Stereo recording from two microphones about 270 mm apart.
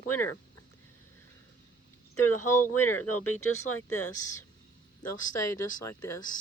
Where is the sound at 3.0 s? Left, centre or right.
Left.